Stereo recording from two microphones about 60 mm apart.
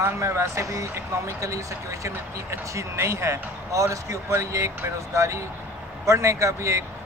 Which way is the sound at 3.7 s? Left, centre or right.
Right.